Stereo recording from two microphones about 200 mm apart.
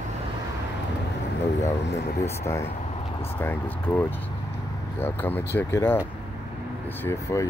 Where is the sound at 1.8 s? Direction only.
60° left (ahead or behind).